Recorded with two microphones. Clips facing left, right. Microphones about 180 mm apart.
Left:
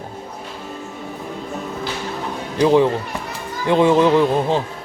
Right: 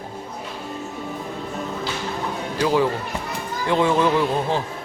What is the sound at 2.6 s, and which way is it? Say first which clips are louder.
A man's voice: left 6 dB; 20° left (ahead or behind).